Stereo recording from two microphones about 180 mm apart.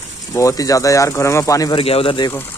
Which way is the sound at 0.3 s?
15° left (ahead or behind).